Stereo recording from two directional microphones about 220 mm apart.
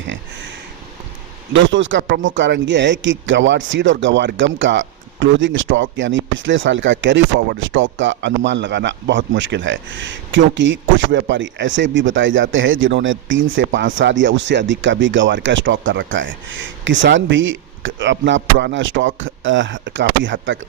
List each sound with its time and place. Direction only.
1.5 s speech: 60° right (ahead or behind)